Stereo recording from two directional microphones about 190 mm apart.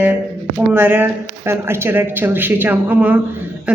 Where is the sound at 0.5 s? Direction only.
10° right (ahead or behind).